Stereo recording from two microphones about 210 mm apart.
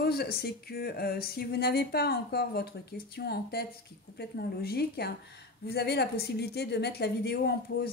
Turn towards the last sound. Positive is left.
turn(degrees=50)  # may be behind; listen again after turning